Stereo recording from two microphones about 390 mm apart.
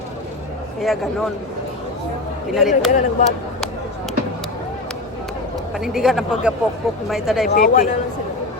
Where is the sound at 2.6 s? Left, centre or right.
Centre.